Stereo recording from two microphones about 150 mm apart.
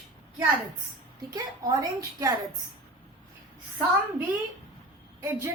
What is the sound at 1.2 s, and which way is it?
A woman's voice, 20° right (ahead or behind).